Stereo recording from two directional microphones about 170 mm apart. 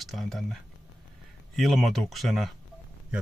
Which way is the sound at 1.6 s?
Centre (ahead or behind).